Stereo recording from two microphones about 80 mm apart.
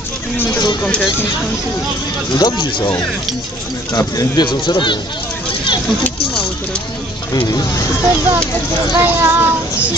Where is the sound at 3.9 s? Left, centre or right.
Left.